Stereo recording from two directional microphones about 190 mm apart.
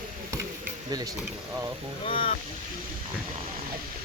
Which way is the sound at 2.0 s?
30° left (ahead or behind).